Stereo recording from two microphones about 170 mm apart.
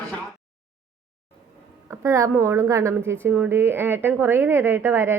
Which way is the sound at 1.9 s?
15° right (ahead or behind).